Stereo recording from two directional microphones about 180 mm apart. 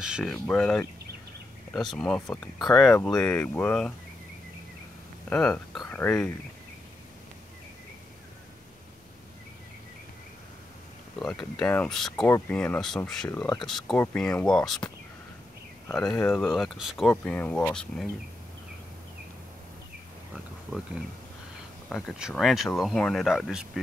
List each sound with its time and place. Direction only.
0.0 s speech: centre (ahead or behind)
5.3 s speech: 5° left (ahead or behind)
11.1 s speech: 5° left (ahead or behind)
16.1 s speech: 15° left (ahead or behind)
16.3 s speech: centre (ahead or behind)
21.8 s speech: centre (ahead or behind)